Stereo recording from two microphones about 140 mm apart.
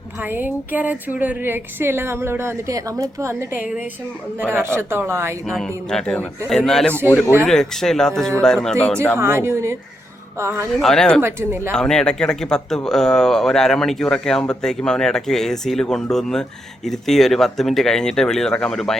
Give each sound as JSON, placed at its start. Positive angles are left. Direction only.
{"t": 0.2, "sound": "speech", "side_deg": -15}
{"t": 5.5, "sound": "speech", "side_deg": 0}
{"t": 9.1, "sound": "speech", "side_deg": -20}
{"t": 10.7, "sound": "speech", "side_deg": 0}
{"t": 11.2, "sound": "speech", "side_deg": -20}
{"t": 11.7, "sound": "speech", "side_deg": 5}